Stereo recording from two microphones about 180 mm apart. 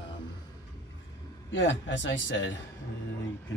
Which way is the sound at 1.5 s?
90° left.